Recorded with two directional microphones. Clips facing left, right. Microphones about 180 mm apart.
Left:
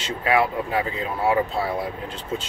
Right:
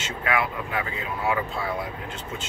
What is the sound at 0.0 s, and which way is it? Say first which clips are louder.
Speech: left 5 dB; 30° left (ahead or behind).